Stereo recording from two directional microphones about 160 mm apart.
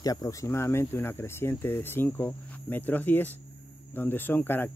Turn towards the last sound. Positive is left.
turn(degrees=15)  # may be behind; listen again after turning